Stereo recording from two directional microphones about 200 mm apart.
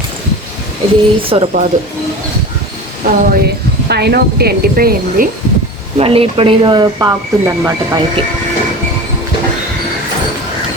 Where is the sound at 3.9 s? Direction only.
55° right (ahead or behind).